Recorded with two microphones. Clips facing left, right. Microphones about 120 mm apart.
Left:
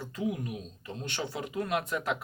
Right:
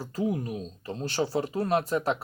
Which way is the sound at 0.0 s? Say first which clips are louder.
Right 4 dB; 35° right (ahead or behind).